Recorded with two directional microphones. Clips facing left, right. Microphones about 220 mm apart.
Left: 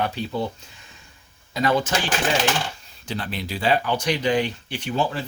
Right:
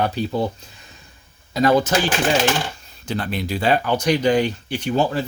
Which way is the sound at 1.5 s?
40° right (ahead or behind).